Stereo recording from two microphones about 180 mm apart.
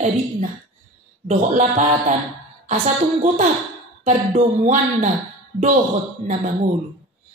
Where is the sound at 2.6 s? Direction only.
40° right (ahead or behind).